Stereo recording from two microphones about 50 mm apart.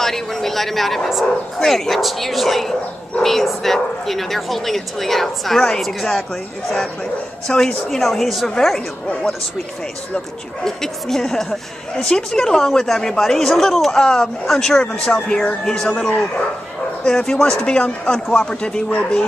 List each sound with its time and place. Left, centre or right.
0.0 s speech: centre
7.4 s speech: centre
10.1 s speech: centre